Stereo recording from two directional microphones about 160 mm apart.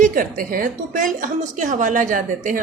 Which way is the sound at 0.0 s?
60° right (ahead or behind).